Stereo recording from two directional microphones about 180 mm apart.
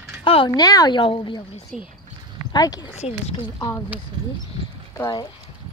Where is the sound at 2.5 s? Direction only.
20° left (ahead or behind).